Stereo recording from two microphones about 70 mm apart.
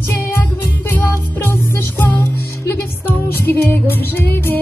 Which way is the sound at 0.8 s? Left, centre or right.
Left.